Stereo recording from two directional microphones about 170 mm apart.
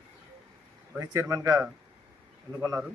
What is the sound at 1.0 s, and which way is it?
Speech, 15° right (ahead or behind).